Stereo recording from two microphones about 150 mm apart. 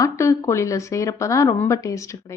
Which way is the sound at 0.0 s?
20° left (ahead or behind).